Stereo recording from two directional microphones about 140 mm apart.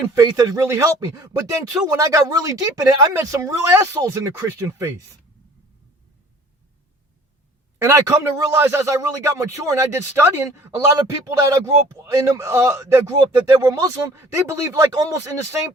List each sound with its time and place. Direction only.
0.2 s a man's voice: 25° right (ahead or behind)
7.8 s a man's voice: 20° right (ahead or behind)